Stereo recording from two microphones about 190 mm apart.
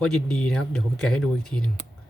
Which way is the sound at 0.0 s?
5° left (ahead or behind).